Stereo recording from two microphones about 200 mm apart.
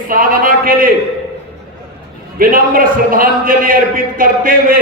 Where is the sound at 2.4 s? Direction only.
45° right (ahead or behind).